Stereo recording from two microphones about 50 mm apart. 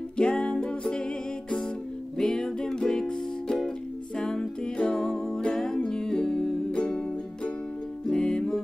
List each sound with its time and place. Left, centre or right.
0.2 s music: centre
2.1 s music: centre